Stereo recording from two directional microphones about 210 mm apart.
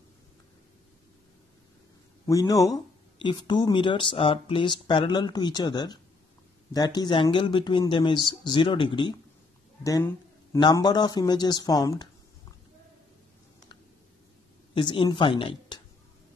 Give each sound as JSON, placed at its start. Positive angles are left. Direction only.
{"t": 2.2, "sound": "speech", "side_deg": 15}
{"t": 14.7, "sound": "speech", "side_deg": 25}